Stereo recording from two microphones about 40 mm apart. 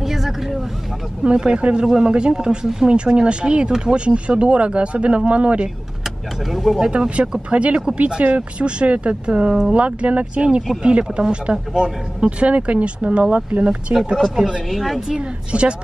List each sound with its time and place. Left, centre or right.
0.0 s vehicle: centre
1.2 s speech: right
6.0 s speech: centre
6.8 s speech: right
7.4 s speech: right
12.2 s speech: right
14.7 s a woman's voice: centre
15.0 s speech: centre